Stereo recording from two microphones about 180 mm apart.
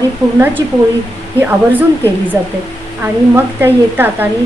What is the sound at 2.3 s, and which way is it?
Speech, 20° right (ahead or behind).